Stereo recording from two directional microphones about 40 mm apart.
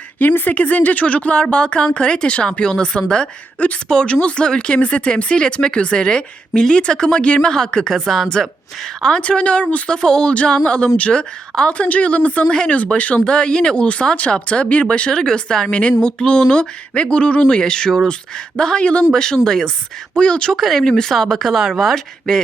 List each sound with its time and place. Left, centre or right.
0.2 s speech: left
3.6 s speech: left
4.0 s speech: left
7.9 s speech: centre
9.2 s speech: left
12.5 s speech: left
14.4 s speech: left
17.6 s speech: centre
20.5 s speech: centre
22.3 s speech: centre